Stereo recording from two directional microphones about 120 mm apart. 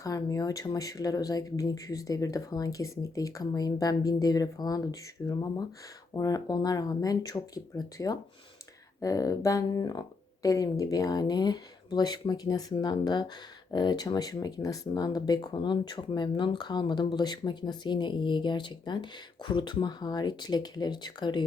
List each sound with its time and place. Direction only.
0.0 s speech: 30° left (ahead or behind)